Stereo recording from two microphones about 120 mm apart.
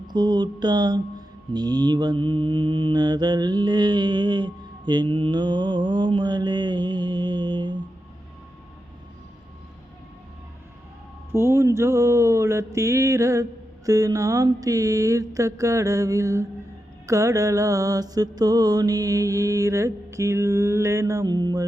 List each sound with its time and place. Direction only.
0.1 s mantra: 40° right (ahead or behind)
11.3 s mantra: 20° right (ahead or behind)